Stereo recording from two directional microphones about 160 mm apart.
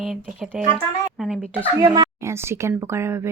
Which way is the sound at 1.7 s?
25° right (ahead or behind).